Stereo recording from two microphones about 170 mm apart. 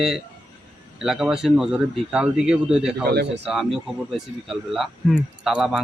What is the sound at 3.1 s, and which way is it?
Speech, 75° right (ahead or behind).